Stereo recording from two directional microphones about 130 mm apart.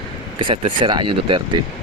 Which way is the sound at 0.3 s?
45° right (ahead or behind).